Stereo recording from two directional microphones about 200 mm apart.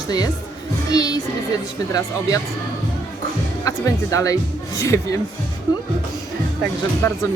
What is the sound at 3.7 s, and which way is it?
Speech, 15° left (ahead or behind).